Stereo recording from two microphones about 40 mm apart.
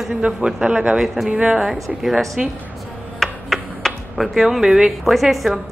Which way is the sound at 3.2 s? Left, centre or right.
Centre.